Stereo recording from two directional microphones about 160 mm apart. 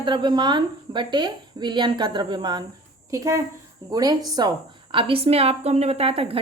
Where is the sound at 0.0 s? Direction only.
30° right (ahead or behind).